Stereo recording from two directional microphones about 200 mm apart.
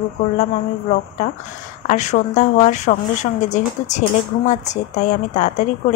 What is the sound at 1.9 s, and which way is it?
Speech, 35° left (ahead or behind).